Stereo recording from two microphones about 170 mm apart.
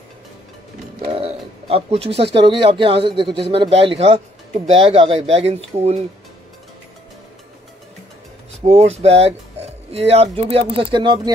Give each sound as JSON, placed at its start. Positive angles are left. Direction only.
{"t": 1.0, "sound": "speech", "side_deg": -35}
{"t": 8.6, "sound": "speech", "side_deg": -40}